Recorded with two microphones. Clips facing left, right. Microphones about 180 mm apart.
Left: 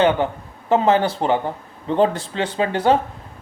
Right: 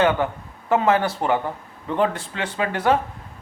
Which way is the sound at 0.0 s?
30° left (ahead or behind).